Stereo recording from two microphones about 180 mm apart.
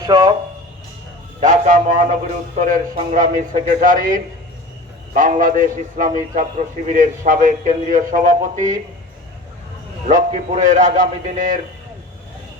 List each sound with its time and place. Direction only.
0.0 s speech: 25° right (ahead or behind)
1.4 s a man's voice: 45° right (ahead or behind)
10.1 s a man's voice: 45° right (ahead or behind)